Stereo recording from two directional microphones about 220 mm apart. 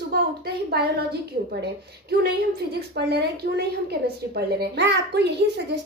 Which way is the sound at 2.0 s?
45° right (ahead or behind).